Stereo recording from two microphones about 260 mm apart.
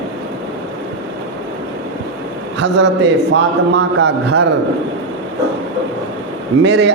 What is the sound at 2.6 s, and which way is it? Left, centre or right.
A man's voice, right.